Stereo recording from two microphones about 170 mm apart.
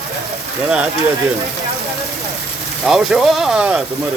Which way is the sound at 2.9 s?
5° right (ahead or behind).